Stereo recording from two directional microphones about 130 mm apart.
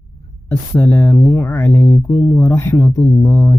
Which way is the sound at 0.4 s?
10° left (ahead or behind).